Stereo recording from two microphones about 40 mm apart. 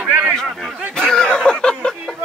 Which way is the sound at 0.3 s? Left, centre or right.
Centre.